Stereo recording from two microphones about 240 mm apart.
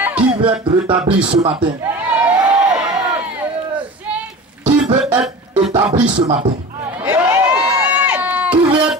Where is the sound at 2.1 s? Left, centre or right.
Centre.